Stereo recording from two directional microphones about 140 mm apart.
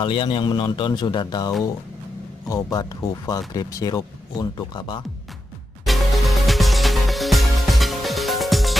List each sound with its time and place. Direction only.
0.0 s a man's voice: 40° left (ahead or behind)
2.5 s speech: 25° left (ahead or behind)
5.9 s music: centre (ahead or behind)